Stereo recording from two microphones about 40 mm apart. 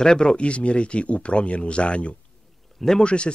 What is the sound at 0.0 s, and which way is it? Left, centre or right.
Speech, centre.